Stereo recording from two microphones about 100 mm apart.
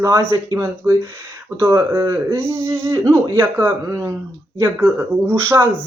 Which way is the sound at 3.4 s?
20° right (ahead or behind).